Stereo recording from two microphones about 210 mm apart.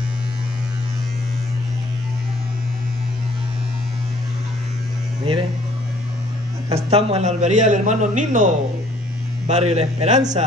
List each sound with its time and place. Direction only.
6.7 s a man's voice: 30° right (ahead or behind)